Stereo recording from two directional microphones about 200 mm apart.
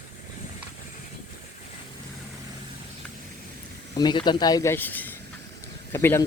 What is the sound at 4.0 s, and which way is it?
Speech, 20° left (ahead or behind).